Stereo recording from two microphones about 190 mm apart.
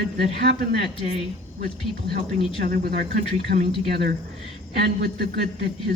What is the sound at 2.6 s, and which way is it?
Speech, 50° right (ahead or behind).